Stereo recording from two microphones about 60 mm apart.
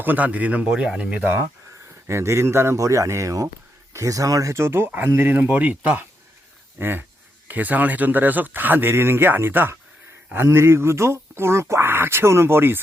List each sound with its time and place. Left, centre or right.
0.0 s speech: right
0.7 s speech: centre
2.0 s a man's voice: right
2.7 s speech: right
4.5 s a man's voice: right
5.0 s speech: right
6.7 s speech: right
7.4 s a man's voice: right